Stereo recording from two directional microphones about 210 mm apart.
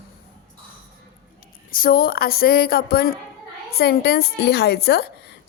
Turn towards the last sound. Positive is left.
turn(degrees=50)  # may be behind; listen again after turning